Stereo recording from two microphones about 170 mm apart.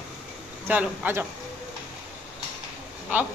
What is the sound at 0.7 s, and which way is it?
Speech, 10° right (ahead or behind).